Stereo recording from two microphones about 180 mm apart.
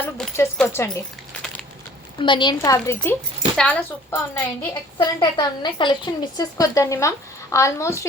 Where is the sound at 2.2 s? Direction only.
25° left (ahead or behind).